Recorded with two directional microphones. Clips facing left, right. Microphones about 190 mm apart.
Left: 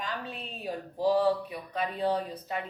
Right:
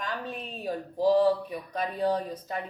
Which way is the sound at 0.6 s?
40° right (ahead or behind).